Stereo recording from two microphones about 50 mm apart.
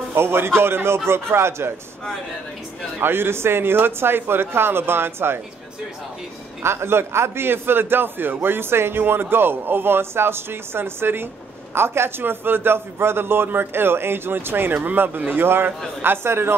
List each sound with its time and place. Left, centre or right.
0.1 s a man's voice: right
3.0 s a man's voice: right
6.6 s a man's voice: right